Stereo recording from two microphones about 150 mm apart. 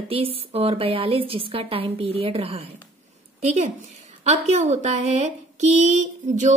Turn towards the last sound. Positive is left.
turn(degrees=-55)  # may be behind; listen again after turning